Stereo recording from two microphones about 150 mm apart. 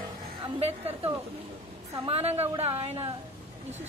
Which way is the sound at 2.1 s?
45° right (ahead or behind).